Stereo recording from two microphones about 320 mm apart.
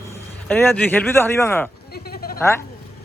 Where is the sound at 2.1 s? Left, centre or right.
Left.